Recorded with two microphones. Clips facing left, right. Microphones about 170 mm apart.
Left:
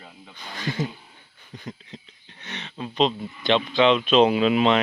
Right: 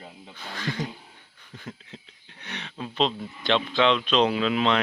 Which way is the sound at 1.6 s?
5° right (ahead or behind).